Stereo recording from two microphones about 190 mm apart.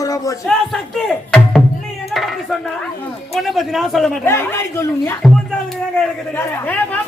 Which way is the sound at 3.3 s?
Centre (ahead or behind).